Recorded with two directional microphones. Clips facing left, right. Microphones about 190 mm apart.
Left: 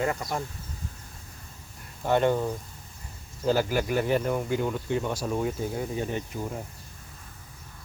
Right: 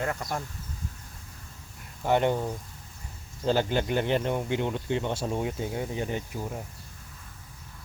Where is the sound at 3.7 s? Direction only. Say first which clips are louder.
Left 1 dB; 25° right (ahead or behind).